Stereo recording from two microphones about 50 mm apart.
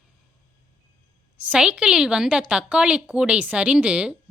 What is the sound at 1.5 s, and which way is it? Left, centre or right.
Speech, centre.